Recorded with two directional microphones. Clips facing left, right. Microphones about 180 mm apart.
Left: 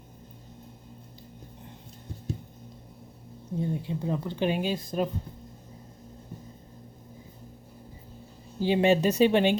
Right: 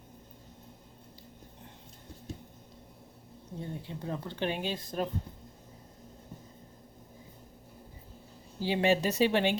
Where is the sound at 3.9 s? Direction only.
15° left (ahead or behind).